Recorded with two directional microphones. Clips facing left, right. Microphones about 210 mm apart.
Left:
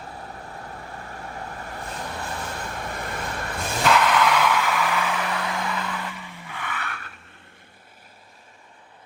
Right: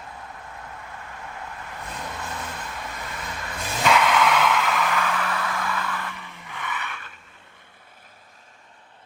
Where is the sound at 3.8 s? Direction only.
Centre (ahead or behind).